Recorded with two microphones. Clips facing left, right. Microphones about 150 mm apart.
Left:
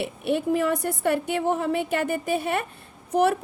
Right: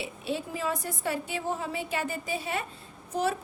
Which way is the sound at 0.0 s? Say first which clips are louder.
Left 8 dB; 60° left (ahead or behind).